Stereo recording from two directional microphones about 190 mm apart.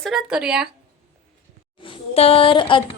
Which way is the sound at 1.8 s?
30° left (ahead or behind).